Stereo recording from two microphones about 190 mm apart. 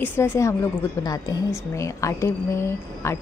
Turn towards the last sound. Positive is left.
turn(degrees=15)  # may be behind; listen again after turning